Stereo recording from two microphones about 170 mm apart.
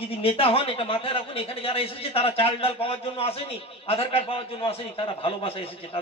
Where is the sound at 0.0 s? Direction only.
35° left (ahead or behind).